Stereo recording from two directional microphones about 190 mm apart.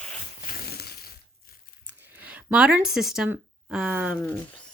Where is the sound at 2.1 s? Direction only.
5° right (ahead or behind).